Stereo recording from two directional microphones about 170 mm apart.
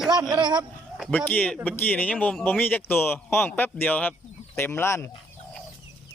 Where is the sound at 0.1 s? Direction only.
25° right (ahead or behind).